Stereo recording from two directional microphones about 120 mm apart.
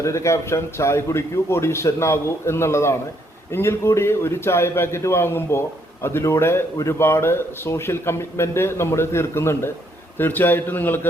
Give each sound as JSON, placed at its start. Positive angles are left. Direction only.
{"t": 0.0, "sound": "a man's voice", "side_deg": 25}